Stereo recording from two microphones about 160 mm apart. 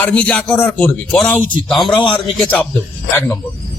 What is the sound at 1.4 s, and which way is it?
Speech, 55° right (ahead or behind).